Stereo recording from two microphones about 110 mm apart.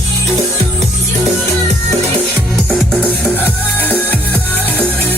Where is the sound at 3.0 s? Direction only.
15° left (ahead or behind).